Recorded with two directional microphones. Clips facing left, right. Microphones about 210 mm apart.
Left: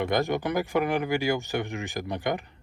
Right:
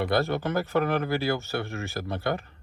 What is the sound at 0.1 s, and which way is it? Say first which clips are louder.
Speech: even; 15° left (ahead or behind).